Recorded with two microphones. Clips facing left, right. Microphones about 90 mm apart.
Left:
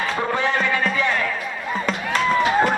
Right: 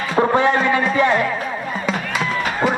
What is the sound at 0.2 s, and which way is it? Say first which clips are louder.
Music: right 9 dB; 30° right (ahead or behind).